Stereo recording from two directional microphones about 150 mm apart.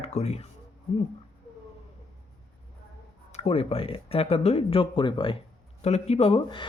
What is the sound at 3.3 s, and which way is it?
Speech, 40° left (ahead or behind).